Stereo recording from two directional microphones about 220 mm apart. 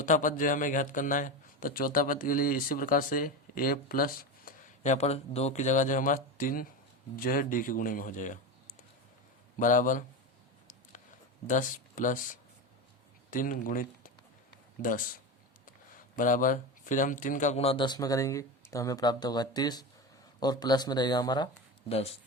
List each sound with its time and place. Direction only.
0.0 s speech: 35° left (ahead or behind)
11.4 s speech: 35° left (ahead or behind)
16.1 s speech: 35° left (ahead or behind)